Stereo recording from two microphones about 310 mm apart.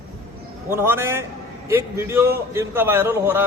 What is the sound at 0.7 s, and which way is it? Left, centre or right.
A man's voice, centre.